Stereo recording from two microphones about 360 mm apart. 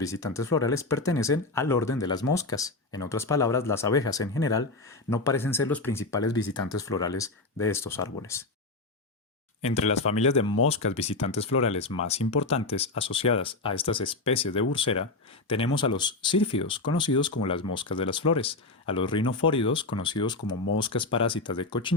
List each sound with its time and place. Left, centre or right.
0.0 s speech: centre
9.6 s speech: centre